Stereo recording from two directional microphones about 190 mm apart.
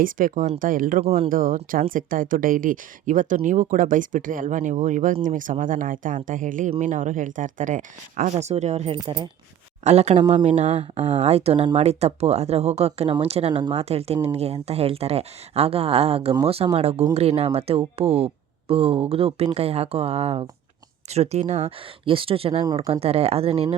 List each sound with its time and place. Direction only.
0.0 s speech: 45° right (ahead or behind)
1.0 s speech: 30° right (ahead or behind)
1.3 s speech: 45° right (ahead or behind); by 23.7 s 30° right (ahead or behind)